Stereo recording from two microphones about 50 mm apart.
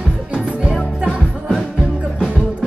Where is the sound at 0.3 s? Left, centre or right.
Right.